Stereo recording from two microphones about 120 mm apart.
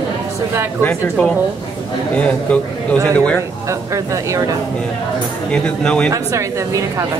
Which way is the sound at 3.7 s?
25° right (ahead or behind).